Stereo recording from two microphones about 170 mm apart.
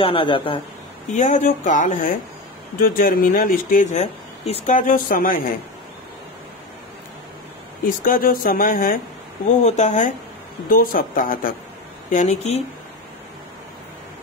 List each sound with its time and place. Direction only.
0.0 s speech: 30° left (ahead or behind)
1.1 s speech: 45° left (ahead or behind)
7.8 s speech: 55° left (ahead or behind)
9.7 s speech: 40° left (ahead or behind)
10.7 s speech: 55° left (ahead or behind)
12.1 s speech: 45° left (ahead or behind)